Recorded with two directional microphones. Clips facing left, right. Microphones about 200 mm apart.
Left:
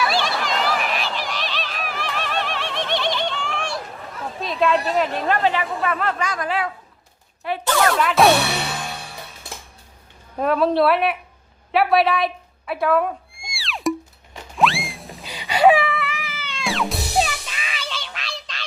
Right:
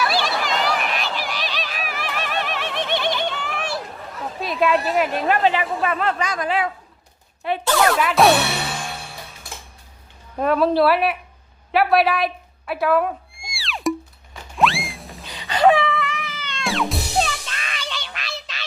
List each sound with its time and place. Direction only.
0.0 s a sound: centre (ahead or behind)
4.4 s speech: 5° right (ahead or behind); by 7.6 s 25° right (ahead or behind)
7.9 s music: centre (ahead or behind)
10.3 s a woman's voice: centre (ahead or behind)
11.7 s a sound: centre (ahead or behind)
14.5 s music: centre (ahead or behind)
15.2 s wail: 15° left (ahead or behind)
15.7 s music: centre (ahead or behind)